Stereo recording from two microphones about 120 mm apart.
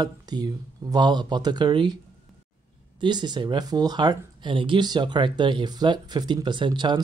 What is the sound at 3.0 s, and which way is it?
Speech, 40° right (ahead or behind).